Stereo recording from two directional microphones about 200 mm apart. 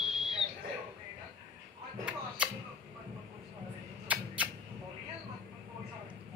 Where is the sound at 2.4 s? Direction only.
5° right (ahead or behind).